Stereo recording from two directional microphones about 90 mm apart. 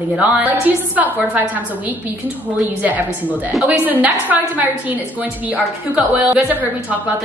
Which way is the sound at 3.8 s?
20° right (ahead or behind).